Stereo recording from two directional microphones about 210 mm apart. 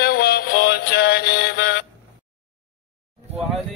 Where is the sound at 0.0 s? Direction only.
50° left (ahead or behind).